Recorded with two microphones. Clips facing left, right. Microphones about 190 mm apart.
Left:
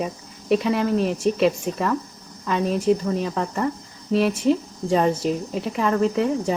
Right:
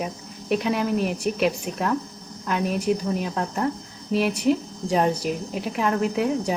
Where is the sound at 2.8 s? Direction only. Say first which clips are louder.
Left 3 dB; 5° right (ahead or behind).